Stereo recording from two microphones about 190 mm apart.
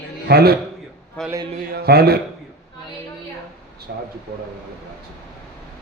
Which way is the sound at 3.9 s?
60° right (ahead or behind).